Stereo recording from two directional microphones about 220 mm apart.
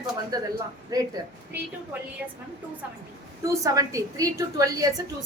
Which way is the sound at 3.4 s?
15° right (ahead or behind).